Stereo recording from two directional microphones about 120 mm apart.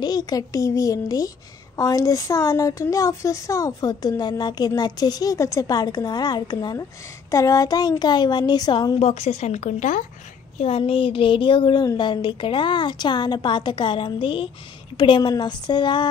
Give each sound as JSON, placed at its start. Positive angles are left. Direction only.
{"t": 0.0, "sound": "a child's voice", "side_deg": 35}
{"t": 9.0, "sound": "a woman's voice", "side_deg": 60}
{"t": 10.6, "sound": "a woman's voice", "side_deg": 55}